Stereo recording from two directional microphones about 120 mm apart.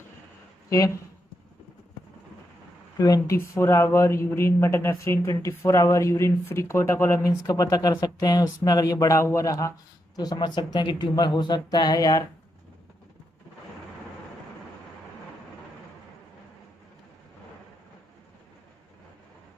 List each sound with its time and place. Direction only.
0.7 s speech: 30° left (ahead or behind)
3.0 s a woman's voice: 25° left (ahead or behind)